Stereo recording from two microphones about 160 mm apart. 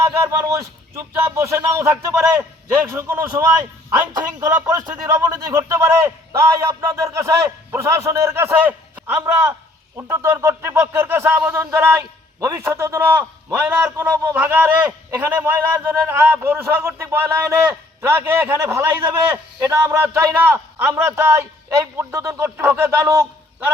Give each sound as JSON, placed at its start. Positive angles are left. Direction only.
{"t": 0.0, "sound": "a man's voice", "side_deg": -20}